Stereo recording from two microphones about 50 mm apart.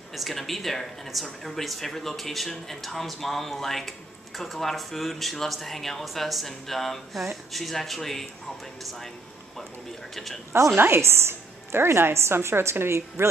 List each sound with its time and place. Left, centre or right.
0.1 s speech: centre
10.1 s speech: centre
10.8 s a woman's voice: right